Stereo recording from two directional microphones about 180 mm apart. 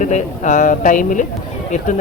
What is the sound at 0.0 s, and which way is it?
A man's voice, 40° left (ahead or behind).